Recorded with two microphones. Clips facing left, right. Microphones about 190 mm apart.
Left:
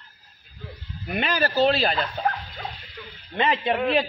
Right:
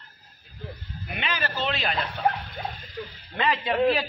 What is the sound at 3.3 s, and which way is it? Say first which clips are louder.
Speech: left 2 dB; 25° left (ahead or behind).